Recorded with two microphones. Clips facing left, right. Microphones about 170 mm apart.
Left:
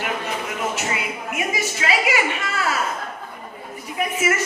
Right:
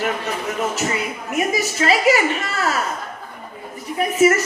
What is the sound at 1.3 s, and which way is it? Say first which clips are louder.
A woman's voice: right 5 dB; 40° right (ahead or behind).